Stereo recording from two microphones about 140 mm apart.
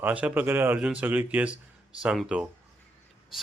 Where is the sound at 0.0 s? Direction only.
10° right (ahead or behind).